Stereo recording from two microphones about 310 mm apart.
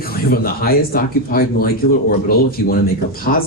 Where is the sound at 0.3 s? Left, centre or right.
Left.